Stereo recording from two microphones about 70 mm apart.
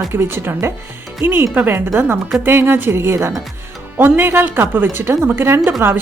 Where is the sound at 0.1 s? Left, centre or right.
Right.